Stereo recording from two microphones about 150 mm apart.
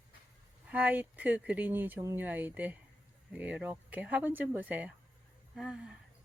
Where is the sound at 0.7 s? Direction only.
10° right (ahead or behind).